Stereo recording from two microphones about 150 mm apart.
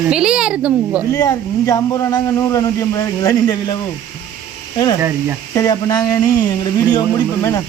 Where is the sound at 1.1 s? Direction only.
25° left (ahead or behind).